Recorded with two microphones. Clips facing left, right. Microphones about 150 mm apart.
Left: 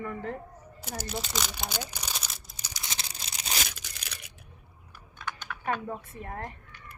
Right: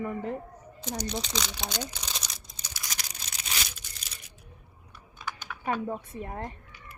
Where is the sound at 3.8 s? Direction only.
70° left (ahead or behind).